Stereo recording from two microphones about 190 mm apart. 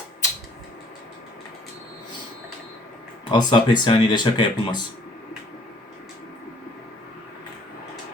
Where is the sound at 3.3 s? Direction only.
25° left (ahead or behind).